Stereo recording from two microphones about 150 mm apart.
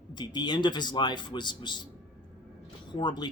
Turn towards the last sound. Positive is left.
turn(degrees=30)  # may be behind; listen again after turning